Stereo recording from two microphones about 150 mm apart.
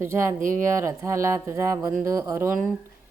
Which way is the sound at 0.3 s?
60° right (ahead or behind).